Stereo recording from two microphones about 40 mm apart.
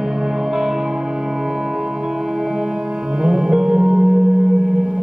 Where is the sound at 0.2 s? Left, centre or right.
Centre.